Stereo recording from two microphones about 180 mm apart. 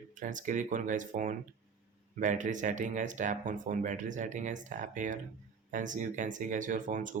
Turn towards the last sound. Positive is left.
turn(degrees=-45)  # may be behind; listen again after turning